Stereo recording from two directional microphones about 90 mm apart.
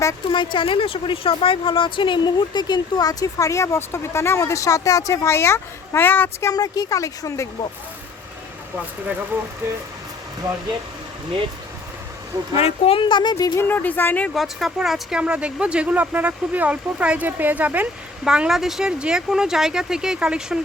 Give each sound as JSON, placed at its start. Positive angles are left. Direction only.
{"t": 0.3, "sound": "a woman's voice", "side_deg": 70}
{"t": 6.5, "sound": "speech", "side_deg": 45}
{"t": 9.6, "sound": "speech", "side_deg": -30}
{"t": 12.5, "sound": "a woman's voice", "side_deg": 90}
{"t": 13.3, "sound": "a woman's voice", "side_deg": 35}
{"t": 13.7, "sound": "speech", "side_deg": 20}
{"t": 14.3, "sound": "speech", "side_deg": 0}
{"t": 18.3, "sound": "speech", "side_deg": -5}